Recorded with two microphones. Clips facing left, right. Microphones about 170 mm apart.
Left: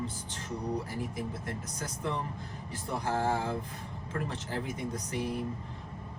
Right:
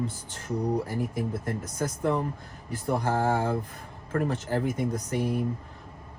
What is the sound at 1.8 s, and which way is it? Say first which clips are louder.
Speech: right 9 dB; 50° right (ahead or behind).